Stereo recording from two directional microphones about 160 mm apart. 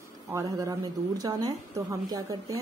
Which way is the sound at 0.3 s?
20° right (ahead or behind).